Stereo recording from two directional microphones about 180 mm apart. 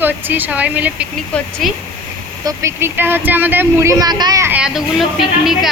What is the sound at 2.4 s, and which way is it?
Speech, 15° right (ahead or behind).